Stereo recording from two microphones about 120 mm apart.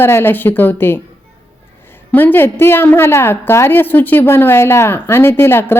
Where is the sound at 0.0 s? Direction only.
20° left (ahead or behind).